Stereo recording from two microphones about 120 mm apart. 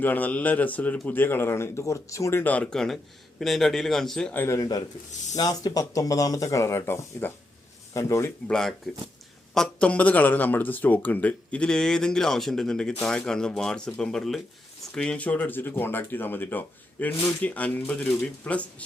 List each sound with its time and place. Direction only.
0.0 s speech: 15° left (ahead or behind)
2.4 s a man's voice: 10° left (ahead or behind)
4.4 s speech: 25° left (ahead or behind)
8.4 s a man's voice: 5° left (ahead or behind)